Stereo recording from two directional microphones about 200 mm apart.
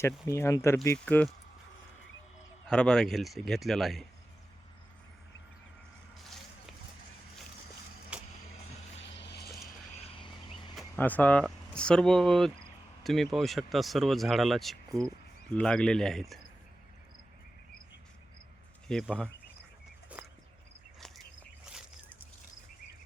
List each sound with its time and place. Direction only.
0.0 s speech: 15° left (ahead or behind)
2.6 s speech: 5° left (ahead or behind)
6.2 s a sound: centre (ahead or behind)
8.1 s vehicle: 5° right (ahead or behind)
9.0 s a sound: 60° left (ahead or behind)
10.0 s vehicle: 25° left (ahead or behind)
10.8 s speech: 10° left (ahead or behind)
14.8 s speech: 15° right (ahead or behind)
15.5 s speech: 5° left (ahead or behind)
18.9 s speech: 5° left (ahead or behind)
20.1 s a sound: 5° right (ahead or behind)
21.7 s a sound: 5° right (ahead or behind)